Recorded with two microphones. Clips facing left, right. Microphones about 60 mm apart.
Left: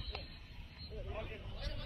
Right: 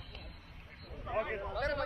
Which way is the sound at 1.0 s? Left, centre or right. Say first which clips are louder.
Right 13 dB; right.